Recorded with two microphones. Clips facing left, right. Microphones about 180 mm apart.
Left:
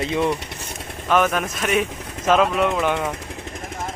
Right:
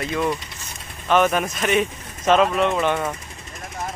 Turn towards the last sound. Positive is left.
turn(degrees=5)  # may be behind; listen again after turning